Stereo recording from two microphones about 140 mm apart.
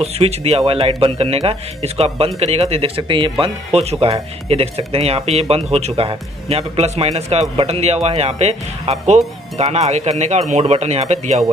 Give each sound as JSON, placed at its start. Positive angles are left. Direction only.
{"t": 0.0, "sound": "speech", "side_deg": -45}